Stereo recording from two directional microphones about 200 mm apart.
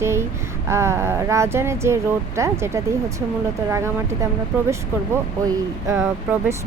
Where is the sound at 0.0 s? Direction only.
15° right (ahead or behind).